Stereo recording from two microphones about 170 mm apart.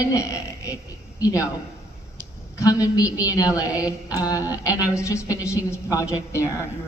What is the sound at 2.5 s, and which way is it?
A woman's voice, 20° left (ahead or behind).